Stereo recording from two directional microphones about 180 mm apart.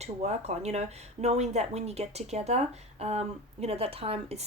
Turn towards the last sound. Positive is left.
turn(degrees=-30)  # may be behind; listen again after turning